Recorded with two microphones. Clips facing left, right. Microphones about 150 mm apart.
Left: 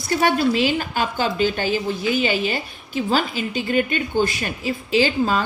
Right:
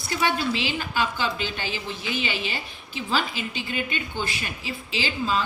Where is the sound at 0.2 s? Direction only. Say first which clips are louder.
Left 6 dB; 50° left (ahead or behind).